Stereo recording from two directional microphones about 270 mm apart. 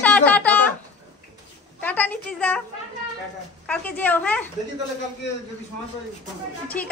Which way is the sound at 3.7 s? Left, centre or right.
Centre.